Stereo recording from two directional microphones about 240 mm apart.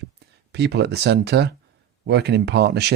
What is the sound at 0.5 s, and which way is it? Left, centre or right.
Speech, right.